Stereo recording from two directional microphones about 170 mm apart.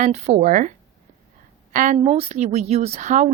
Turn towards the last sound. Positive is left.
turn(degrees=-45)  # may be behind; listen again after turning